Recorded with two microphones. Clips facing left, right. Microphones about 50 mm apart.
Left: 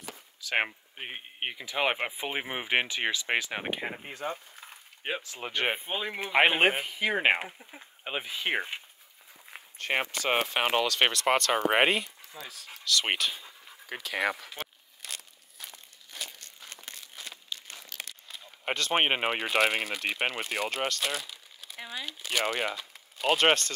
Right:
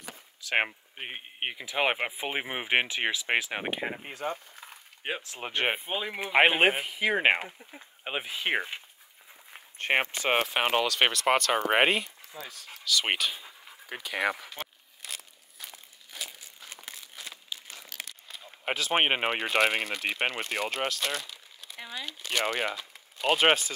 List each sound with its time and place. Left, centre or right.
0.5 s speech: centre
5.4 s speech: centre
5.9 s speech: centre
7.3 s speech: centre
8.0 s speech: centre
9.8 s speech: right
10.4 s speech: centre
14.5 s crumpling: centre
17.9 s speech: centre